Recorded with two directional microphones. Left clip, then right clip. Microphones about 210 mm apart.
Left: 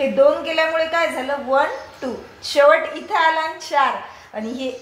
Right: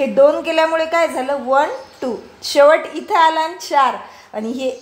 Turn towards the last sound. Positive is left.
turn(degrees=-60)  # may be behind; listen again after turning